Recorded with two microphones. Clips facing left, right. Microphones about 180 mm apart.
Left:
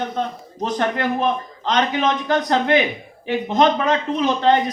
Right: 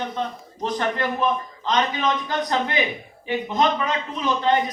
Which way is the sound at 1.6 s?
75° left (ahead or behind).